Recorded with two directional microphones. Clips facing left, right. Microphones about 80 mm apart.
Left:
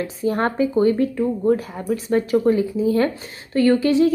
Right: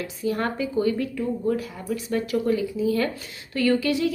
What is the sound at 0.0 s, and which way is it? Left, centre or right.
A woman's voice, left.